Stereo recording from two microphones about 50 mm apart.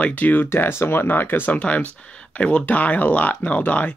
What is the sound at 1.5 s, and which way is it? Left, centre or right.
Speech, left.